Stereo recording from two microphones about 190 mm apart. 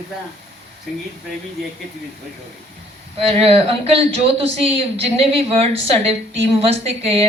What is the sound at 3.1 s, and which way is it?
Speech, 30° right (ahead or behind).